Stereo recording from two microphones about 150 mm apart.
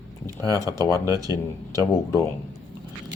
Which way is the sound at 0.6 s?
25° right (ahead or behind).